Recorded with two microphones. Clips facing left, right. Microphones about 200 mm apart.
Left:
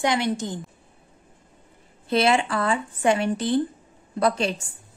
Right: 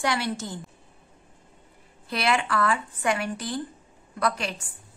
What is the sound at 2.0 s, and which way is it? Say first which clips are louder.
Speech: left 5 dB; 25° left (ahead or behind).